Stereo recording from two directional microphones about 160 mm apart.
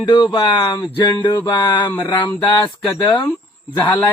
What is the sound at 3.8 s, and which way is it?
Speech, 10° left (ahead or behind).